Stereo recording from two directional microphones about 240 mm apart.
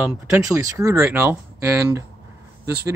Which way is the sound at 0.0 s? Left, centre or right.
Centre.